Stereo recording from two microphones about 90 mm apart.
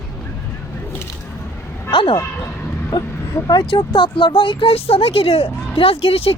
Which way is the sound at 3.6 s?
70° left (ahead or behind).